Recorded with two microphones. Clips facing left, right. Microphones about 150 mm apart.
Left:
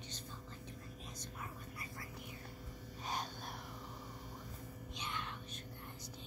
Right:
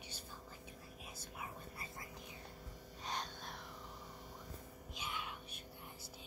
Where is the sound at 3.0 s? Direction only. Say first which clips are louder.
Left 2 dB; 5° left (ahead or behind).